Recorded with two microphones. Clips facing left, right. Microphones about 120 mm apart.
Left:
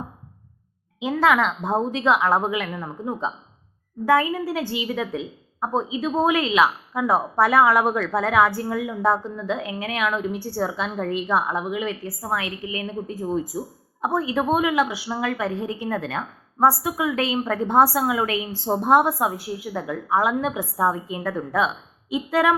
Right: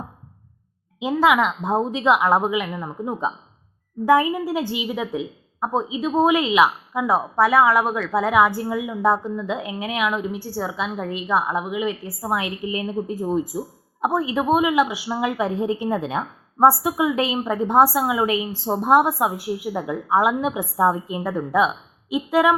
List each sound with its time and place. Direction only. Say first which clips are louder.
1.2 s a woman's voice: right 1 dB; 5° right (ahead or behind); by 4.4 s 20° right (ahead or behind)
4.4 s a woman's voice: right 2 dB; centre (ahead or behind)
12.3 s a woman's voice: right 3 dB; 25° right (ahead or behind)
13.5 s a woman's voice: right 1 dB; centre (ahead or behind)
15.3 s a woman's voice: right 3 dB; 25° right (ahead or behind)
17.2 s a woman's voice: right 1 dB; 5° right (ahead or behind)
19.6 s a woman's voice: right 3 dB; 20° right (ahead or behind)
20.9 s a woman's voice: right 2 dB; 25° right (ahead or behind)
22.1 s a woman's voice: right 2 dB; centre (ahead or behind)